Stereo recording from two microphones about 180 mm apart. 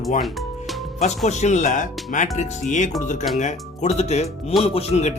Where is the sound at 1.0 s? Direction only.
40° left (ahead or behind).